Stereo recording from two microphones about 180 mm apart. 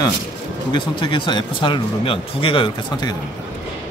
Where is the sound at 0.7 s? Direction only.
25° left (ahead or behind).